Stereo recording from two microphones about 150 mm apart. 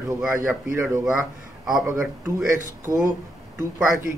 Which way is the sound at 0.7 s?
15° right (ahead or behind).